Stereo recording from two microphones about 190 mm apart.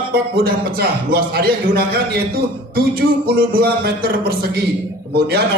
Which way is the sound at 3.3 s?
50° right (ahead or behind).